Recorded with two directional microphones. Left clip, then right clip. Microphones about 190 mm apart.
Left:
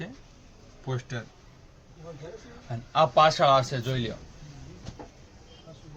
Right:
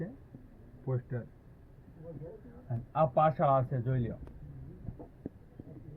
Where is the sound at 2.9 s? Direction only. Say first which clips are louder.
Left 7 dB; 5° left (ahead or behind).